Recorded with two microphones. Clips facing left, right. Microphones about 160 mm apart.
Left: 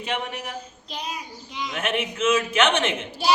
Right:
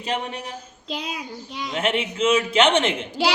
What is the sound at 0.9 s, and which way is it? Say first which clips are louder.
Child singing: right 4 dB; 90° right.